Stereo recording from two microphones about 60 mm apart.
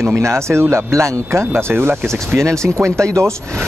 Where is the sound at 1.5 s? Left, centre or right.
Right.